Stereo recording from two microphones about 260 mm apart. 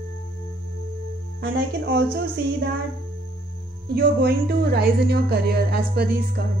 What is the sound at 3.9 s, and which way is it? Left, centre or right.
Speech, right.